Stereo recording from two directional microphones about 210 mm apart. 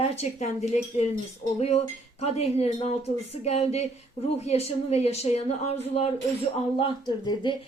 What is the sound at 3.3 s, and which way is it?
Speech, 30° left (ahead or behind).